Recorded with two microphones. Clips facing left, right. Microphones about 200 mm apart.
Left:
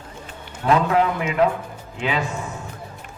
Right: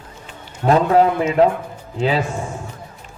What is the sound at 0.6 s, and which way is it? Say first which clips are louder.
Speech: right 4 dB; 35° right (ahead or behind).